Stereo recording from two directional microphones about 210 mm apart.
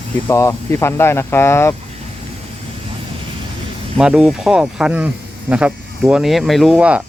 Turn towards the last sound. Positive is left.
turn(degrees=-5)  # may be behind; listen again after turning